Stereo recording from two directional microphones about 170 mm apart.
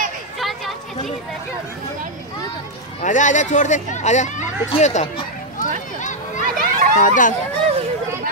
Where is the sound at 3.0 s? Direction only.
45° left (ahead or behind).